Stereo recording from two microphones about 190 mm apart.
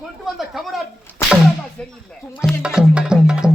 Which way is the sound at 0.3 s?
Centre (ahead or behind).